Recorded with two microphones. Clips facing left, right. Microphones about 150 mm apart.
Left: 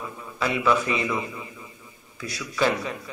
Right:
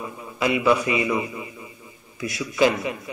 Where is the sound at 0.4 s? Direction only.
10° right (ahead or behind).